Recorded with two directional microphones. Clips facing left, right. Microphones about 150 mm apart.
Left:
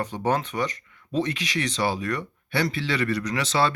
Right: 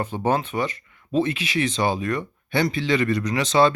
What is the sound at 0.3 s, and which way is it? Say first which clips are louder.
Speech: right 2 dB; 10° right (ahead or behind).